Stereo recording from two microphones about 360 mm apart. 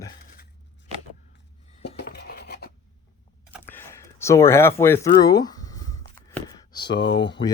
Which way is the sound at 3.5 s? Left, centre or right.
Centre.